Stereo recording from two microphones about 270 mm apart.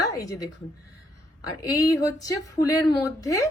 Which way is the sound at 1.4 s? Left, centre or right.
Centre.